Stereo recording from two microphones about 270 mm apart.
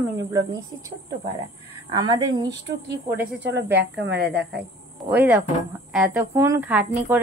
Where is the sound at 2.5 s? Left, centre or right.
Right.